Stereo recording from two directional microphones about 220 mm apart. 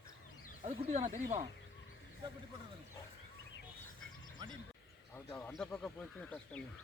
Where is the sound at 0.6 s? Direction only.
30° right (ahead or behind).